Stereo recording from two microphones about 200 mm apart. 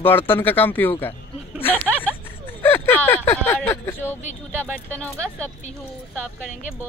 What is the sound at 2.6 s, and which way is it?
Speech, 10° left (ahead or behind).